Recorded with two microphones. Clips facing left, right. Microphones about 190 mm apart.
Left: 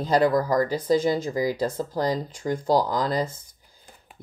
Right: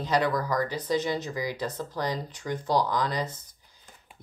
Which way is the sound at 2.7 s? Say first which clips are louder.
Left 2 dB; 40° left (ahead or behind).